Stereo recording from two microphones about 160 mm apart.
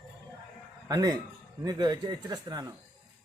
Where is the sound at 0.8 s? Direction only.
25° right (ahead or behind).